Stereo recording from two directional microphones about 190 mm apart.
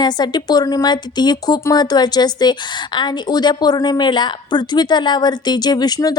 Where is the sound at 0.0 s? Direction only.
20° left (ahead or behind).